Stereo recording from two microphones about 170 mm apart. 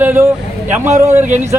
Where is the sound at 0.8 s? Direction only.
40° right (ahead or behind).